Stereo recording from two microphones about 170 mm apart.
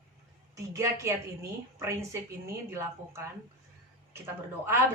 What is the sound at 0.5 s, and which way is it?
A woman's voice, 15° right (ahead or behind).